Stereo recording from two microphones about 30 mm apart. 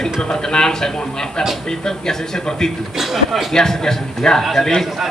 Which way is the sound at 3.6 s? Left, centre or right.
Centre.